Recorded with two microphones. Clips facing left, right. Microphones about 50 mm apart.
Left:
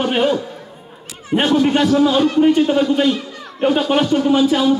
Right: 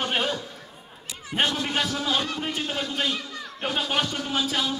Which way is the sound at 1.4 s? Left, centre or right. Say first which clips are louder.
Left 10 dB; centre.